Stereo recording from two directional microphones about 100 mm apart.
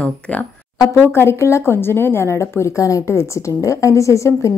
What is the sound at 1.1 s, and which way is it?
A woman's voice, 25° left (ahead or behind).